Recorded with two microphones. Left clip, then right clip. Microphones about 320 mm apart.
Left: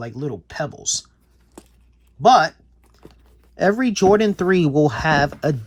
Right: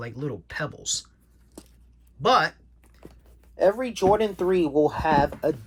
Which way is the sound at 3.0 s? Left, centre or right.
Centre.